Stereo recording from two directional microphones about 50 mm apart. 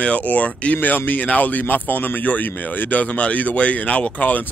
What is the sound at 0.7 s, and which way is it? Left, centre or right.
Speech, left.